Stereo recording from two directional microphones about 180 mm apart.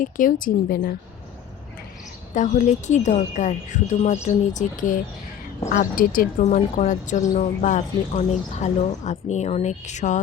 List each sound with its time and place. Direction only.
0.0 s a woman's voice: 50° left (ahead or behind)
2.3 s speech: 45° left (ahead or behind)